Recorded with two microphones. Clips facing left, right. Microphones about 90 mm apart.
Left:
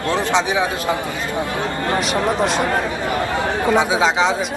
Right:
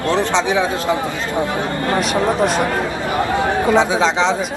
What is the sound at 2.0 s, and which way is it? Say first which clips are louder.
Speech: right 3 dB; centre (ahead or behind).